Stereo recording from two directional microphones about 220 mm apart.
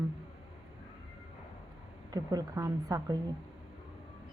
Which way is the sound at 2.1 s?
15° right (ahead or behind).